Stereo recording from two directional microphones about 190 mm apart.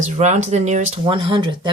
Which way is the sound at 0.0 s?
35° right (ahead or behind).